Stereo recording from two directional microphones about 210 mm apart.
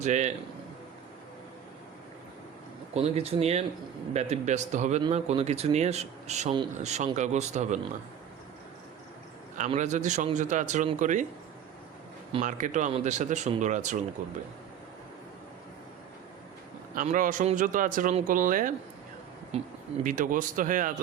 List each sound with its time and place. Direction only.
0.0 s speech: 35° right (ahead or behind)
2.9 s speech: 30° right (ahead or behind)
9.6 s speech: 35° right (ahead or behind)
12.3 s speech: 35° right (ahead or behind)
16.9 s speech: 40° right (ahead or behind)
19.5 s speech: 30° right (ahead or behind)
20.1 s speech: 40° right (ahead or behind)